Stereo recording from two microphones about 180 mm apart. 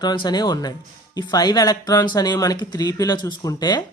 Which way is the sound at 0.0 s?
25° left (ahead or behind).